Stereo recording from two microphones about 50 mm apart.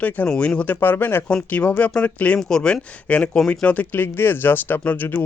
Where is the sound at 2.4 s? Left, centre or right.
Centre.